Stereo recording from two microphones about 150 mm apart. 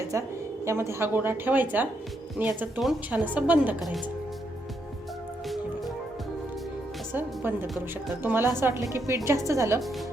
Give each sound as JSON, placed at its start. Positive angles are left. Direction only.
{"t": 0.1, "sound": "a woman's voice", "side_deg": -20}
{"t": 7.1, "sound": "a woman's voice", "side_deg": -15}